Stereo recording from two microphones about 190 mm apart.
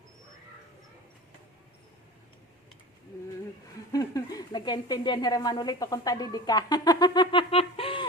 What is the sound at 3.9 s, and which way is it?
Speech, 20° left (ahead or behind).